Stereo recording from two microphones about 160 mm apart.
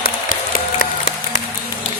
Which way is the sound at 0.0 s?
65° left (ahead or behind).